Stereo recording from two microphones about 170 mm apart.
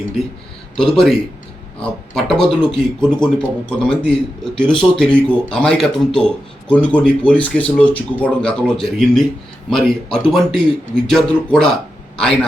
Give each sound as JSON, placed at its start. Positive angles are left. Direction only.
{"t": 0.8, "sound": "speech", "side_deg": 5}